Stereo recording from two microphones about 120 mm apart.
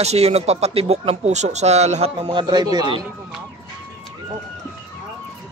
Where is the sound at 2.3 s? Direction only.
35° right (ahead or behind).